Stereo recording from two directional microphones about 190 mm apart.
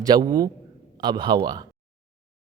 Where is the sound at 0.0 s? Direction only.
20° right (ahead or behind).